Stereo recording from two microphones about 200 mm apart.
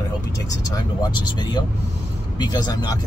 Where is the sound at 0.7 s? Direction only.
20° left (ahead or behind).